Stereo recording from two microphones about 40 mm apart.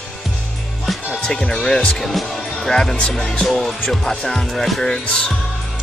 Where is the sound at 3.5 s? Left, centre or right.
Centre.